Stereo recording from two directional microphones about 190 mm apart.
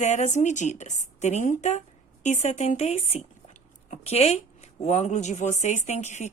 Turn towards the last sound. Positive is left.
turn(degrees=35)  # may be behind; listen again after turning